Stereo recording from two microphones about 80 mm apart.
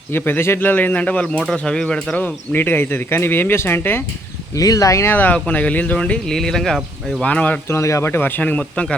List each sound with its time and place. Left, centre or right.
0.1 s speech: left; by 2.1 s centre
2.1 s speech: left
4.5 s speech: left
5.1 s speech: left; by 6.7 s centre
7.2 s speech: centre
7.7 s speech: left; by 9.0 s centre